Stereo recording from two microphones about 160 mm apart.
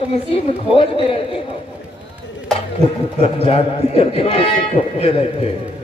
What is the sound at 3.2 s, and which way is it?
A woman's voice, 35° left (ahead or behind).